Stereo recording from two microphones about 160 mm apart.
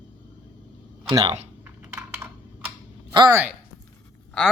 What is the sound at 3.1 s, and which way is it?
Speech, 20° right (ahead or behind).